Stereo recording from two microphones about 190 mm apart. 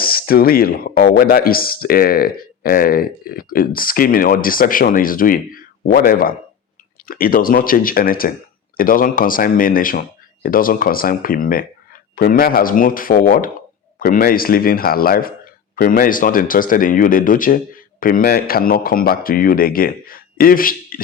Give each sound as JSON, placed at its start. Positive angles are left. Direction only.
{"t": 0.0, "sound": "speech", "side_deg": 50}